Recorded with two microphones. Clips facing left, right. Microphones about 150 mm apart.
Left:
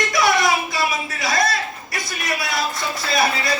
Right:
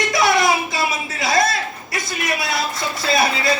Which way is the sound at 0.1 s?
25° right (ahead or behind).